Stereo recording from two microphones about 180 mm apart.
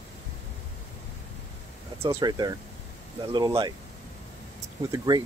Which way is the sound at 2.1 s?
25° right (ahead or behind).